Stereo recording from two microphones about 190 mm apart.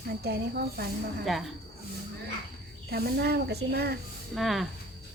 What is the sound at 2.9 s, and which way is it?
Speech, 55° right (ahead or behind).